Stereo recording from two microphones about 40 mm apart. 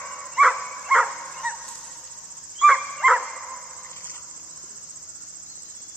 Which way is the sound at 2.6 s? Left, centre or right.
Centre.